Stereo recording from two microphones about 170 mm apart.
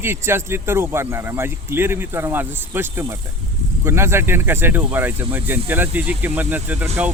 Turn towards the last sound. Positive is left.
turn(degrees=-10)  # may be behind; listen again after turning